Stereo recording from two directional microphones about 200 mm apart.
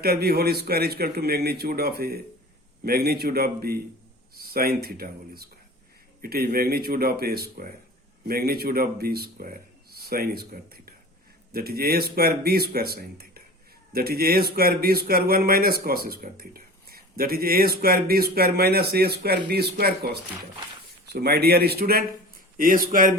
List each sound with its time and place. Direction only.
0.0 s speech: 50° right (ahead or behind)
21.1 s speech: 50° right (ahead or behind)